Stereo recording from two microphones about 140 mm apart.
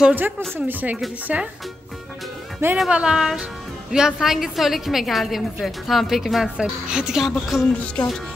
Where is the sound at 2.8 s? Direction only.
5° right (ahead or behind).